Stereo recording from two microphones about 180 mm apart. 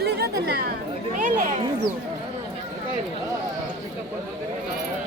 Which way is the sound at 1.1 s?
50° right (ahead or behind).